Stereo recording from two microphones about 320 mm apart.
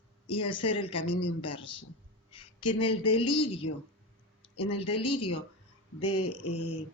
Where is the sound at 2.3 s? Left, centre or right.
Centre.